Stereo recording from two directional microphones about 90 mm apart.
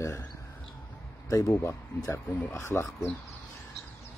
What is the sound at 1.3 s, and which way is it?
Speech, 30° left (ahead or behind).